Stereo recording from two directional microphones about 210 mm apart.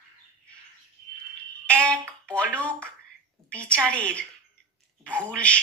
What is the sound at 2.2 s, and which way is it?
A woman's voice, 5° left (ahead or behind).